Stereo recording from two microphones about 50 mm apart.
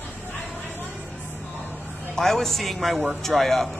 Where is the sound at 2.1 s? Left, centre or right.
Centre.